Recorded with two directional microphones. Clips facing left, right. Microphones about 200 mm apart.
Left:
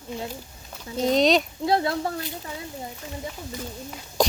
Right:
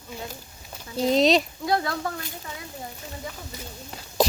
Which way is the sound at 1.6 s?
25° left (ahead or behind).